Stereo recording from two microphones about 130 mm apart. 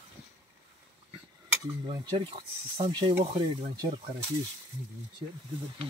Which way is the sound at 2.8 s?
35° right (ahead or behind).